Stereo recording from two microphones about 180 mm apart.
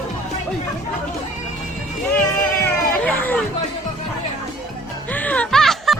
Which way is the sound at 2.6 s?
10° left (ahead or behind).